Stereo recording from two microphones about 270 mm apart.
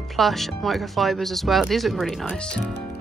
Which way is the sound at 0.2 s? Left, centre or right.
Centre.